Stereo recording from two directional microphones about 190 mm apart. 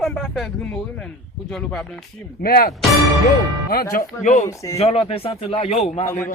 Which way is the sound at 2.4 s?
55° left (ahead or behind).